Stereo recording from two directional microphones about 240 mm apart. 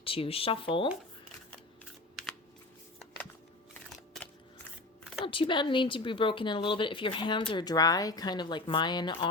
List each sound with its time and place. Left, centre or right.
0.0 s speech: left
5.2 s speech: left